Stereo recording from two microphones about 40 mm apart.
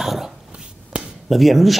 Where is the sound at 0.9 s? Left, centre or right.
Right.